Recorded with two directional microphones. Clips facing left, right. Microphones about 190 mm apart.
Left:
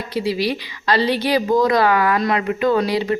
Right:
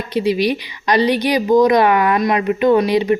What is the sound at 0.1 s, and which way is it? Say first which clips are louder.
A woman's voice: right 4 dB; 20° right (ahead or behind).